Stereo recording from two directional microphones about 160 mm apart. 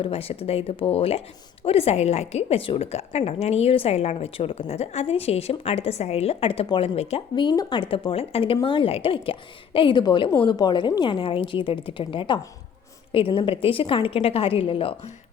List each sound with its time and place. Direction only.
0.0 s a woman's voice: 35° left (ahead or behind)
7.3 s a woman's voice: 25° left (ahead or behind)